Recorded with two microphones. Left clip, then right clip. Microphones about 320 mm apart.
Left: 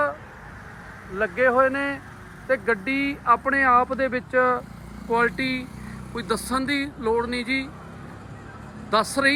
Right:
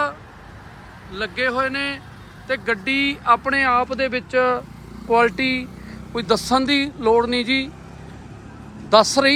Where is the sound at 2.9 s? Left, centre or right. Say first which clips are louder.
Right 5 dB; right.